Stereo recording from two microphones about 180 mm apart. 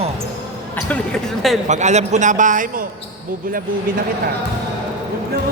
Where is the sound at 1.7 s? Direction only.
40° right (ahead or behind).